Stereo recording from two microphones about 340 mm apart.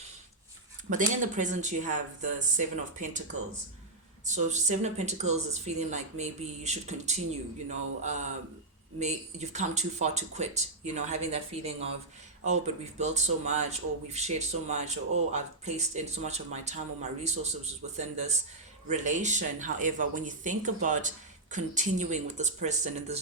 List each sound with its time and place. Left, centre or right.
0.9 s speech: right
4.3 s speech: right